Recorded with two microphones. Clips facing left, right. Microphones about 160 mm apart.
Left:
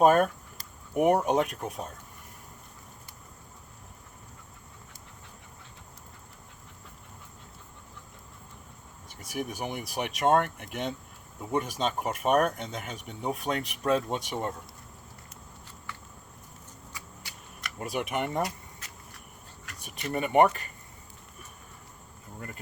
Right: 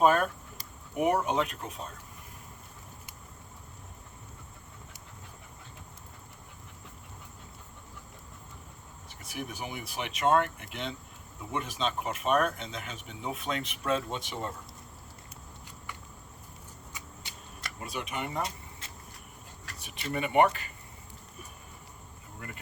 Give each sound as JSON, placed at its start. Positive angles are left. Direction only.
{"t": 0.0, "sound": "speech", "side_deg": 45}
{"t": 9.3, "sound": "speech", "side_deg": 45}
{"t": 15.9, "sound": "a sound", "side_deg": -15}
{"t": 16.9, "sound": "shuffling cards", "side_deg": -20}
{"t": 17.7, "sound": "speech", "side_deg": 55}
{"t": 19.8, "sound": "speech", "side_deg": 45}
{"t": 22.4, "sound": "speech", "side_deg": 40}